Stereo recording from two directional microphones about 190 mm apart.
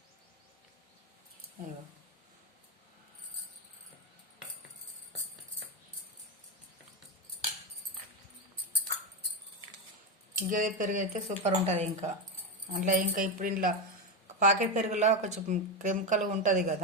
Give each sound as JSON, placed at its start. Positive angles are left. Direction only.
{"t": 10.5, "sound": "a woman's voice", "side_deg": -45}